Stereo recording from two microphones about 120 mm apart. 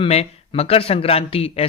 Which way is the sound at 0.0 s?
60° left (ahead or behind).